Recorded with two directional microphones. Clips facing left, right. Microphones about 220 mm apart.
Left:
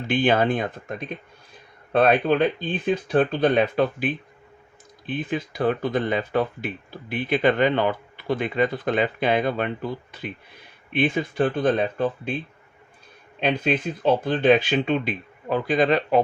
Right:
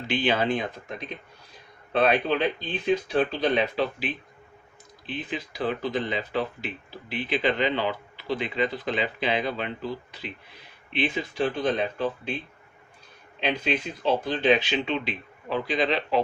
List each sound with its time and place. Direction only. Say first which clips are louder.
0.1 s speech: left 4 dB; 50° left (ahead or behind)
13.4 s speech: left 4 dB; 55° left (ahead or behind)